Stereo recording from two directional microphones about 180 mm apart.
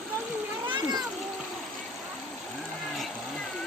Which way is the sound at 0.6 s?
25° right (ahead or behind).